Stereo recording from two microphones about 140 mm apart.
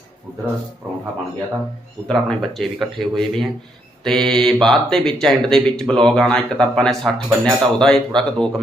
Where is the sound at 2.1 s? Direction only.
Centre (ahead or behind).